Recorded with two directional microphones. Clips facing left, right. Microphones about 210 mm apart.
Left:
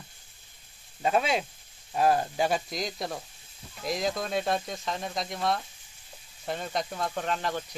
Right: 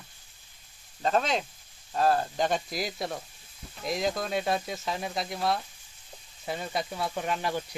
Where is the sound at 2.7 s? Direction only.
5° right (ahead or behind).